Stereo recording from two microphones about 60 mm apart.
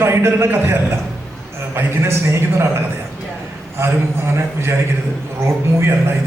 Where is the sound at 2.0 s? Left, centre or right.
Right.